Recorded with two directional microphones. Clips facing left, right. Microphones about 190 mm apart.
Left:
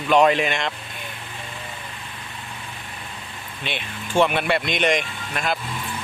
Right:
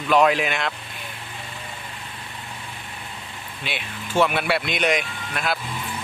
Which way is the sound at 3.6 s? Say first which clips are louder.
Left 1 dB; 5° right (ahead or behind).